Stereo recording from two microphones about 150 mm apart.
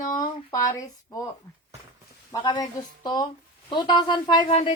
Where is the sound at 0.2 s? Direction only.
25° left (ahead or behind).